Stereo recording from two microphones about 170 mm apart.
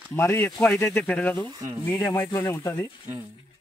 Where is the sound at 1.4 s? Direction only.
20° right (ahead or behind).